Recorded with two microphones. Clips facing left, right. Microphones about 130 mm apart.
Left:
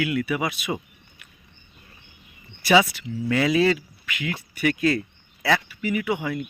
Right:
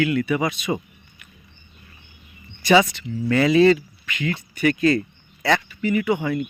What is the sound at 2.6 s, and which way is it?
Speech, 5° left (ahead or behind).